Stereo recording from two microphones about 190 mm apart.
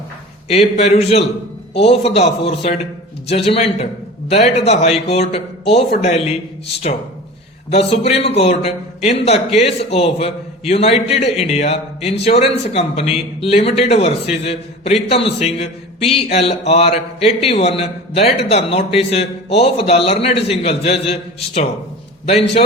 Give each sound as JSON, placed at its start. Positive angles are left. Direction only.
{"t": 0.8, "sound": "a man's voice", "side_deg": 35}
{"t": 7.7, "sound": "a man's voice", "side_deg": 35}